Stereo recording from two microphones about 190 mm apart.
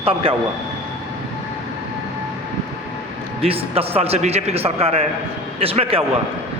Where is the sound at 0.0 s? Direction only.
30° right (ahead or behind).